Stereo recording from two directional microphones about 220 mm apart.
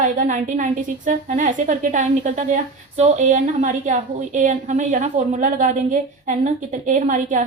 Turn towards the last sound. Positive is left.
turn(degrees=-35)  # may be behind; listen again after turning